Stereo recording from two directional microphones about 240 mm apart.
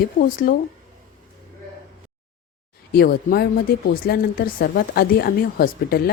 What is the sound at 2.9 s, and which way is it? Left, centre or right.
A woman's voice, left.